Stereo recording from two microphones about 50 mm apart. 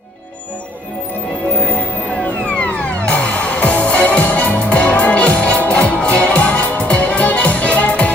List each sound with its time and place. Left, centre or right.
3.1 s music: left